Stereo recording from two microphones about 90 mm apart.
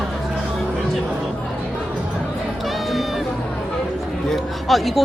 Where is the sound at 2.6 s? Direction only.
Centre (ahead or behind).